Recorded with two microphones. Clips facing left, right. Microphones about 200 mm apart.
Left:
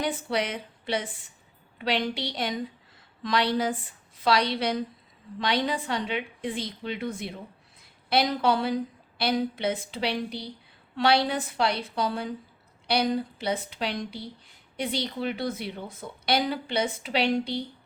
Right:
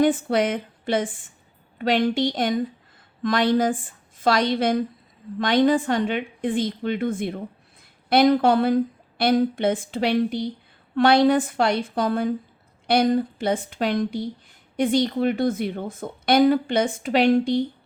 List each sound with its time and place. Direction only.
0.0 s a woman's voice: 50° right (ahead or behind)